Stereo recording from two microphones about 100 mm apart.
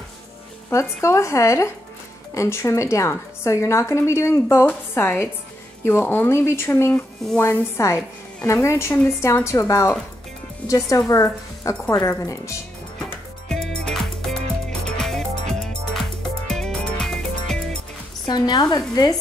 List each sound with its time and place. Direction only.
0.7 s a woman's voice: 30° left (ahead or behind)
6.9 s speech: 15° left (ahead or behind)
7.7 s a woman's voice: 30° left (ahead or behind)
13.5 s music: 5° left (ahead or behind)
18.2 s a woman's voice: 45° left (ahead or behind)